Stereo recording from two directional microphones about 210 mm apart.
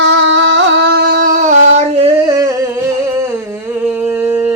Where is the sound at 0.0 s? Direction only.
60° right (ahead or behind); by 2.6 s 15° right (ahead or behind).